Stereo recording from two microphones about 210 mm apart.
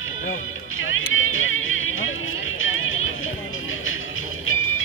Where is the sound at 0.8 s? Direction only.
70° left (ahead or behind).